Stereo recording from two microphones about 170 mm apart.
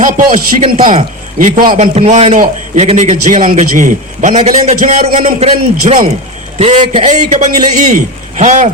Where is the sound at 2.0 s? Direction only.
40° right (ahead or behind).